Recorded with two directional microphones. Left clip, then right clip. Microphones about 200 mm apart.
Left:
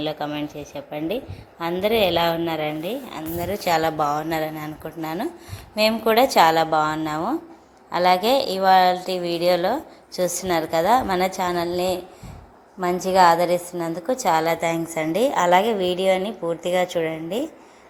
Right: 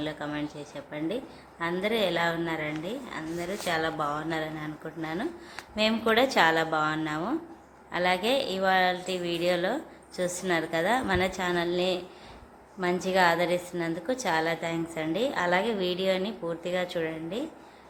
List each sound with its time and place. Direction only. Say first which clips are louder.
0.0 s a woman's voice: left 7 dB; 20° left (ahead or behind)